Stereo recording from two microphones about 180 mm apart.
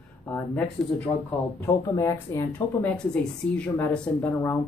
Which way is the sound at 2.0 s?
15° left (ahead or behind).